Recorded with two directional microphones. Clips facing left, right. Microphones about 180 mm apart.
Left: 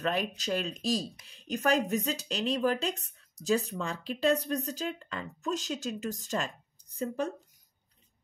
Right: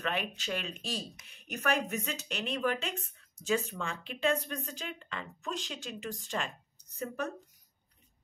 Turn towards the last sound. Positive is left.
turn(degrees=30)  # may be behind; listen again after turning